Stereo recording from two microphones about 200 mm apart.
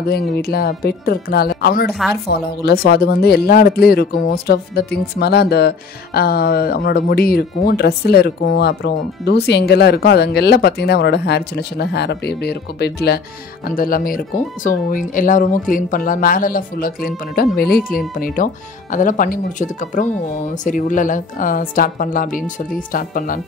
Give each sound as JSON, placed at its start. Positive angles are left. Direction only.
{"t": 0.0, "sound": "speech", "side_deg": 50}
{"t": 13.7, "sound": "speech", "side_deg": 45}